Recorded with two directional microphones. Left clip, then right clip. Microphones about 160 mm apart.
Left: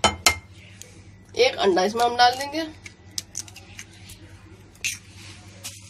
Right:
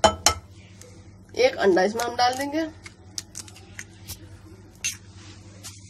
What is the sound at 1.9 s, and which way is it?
Speech, 40° right (ahead or behind).